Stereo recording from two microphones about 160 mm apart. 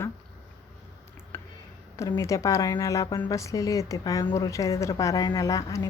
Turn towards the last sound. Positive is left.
turn(degrees=20)  # may be behind; listen again after turning